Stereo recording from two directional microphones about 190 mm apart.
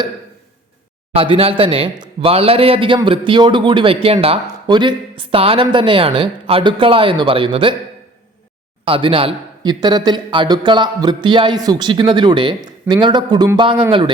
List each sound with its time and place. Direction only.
1.1 s a man's voice: 30° right (ahead or behind)
8.8 s a man's voice: 30° right (ahead or behind)